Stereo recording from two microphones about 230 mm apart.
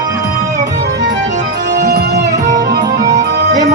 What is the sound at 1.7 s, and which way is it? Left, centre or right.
Music, right.